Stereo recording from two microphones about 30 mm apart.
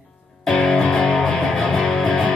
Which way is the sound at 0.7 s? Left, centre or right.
Left.